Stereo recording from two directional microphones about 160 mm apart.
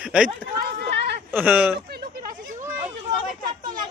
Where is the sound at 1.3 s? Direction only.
10° right (ahead or behind).